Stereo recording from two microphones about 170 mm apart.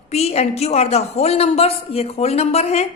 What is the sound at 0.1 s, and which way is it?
A woman's voice, 40° left (ahead or behind).